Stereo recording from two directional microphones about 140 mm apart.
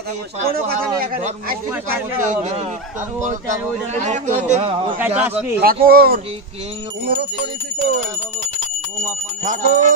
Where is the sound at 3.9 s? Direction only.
55° right (ahead or behind).